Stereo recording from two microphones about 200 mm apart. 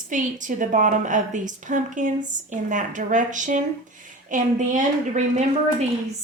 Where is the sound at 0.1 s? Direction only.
40° right (ahead or behind).